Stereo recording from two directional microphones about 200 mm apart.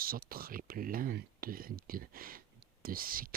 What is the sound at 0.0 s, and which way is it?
Speech, 45° right (ahead or behind).